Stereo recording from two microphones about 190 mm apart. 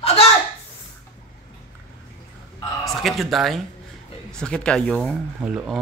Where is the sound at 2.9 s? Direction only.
Centre (ahead or behind).